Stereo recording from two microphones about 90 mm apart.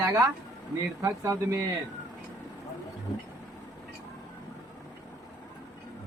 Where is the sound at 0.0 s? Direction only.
35° right (ahead or behind).